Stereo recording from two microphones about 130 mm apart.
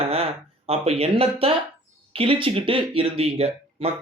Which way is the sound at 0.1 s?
50° right (ahead or behind).